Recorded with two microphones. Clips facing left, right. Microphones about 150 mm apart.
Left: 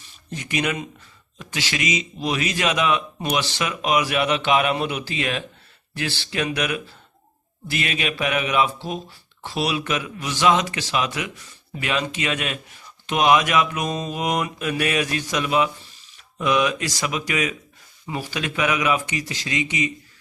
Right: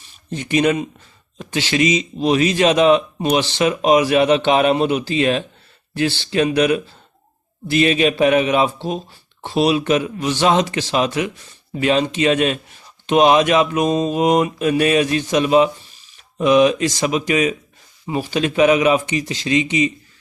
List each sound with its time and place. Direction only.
0.3 s a man's voice: 30° right (ahead or behind)